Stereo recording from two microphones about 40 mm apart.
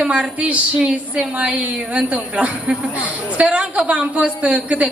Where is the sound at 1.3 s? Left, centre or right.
Right.